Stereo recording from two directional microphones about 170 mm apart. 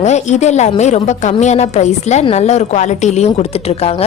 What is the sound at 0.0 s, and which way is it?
A woman's voice, 40° left (ahead or behind).